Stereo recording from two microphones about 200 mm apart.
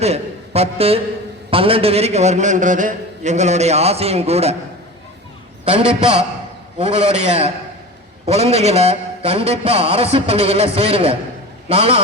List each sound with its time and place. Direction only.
0.0 s a man's voice: 30° right (ahead or behind)
5.7 s a man's voice: 5° right (ahead or behind)
6.7 s a man's voice: 35° right (ahead or behind)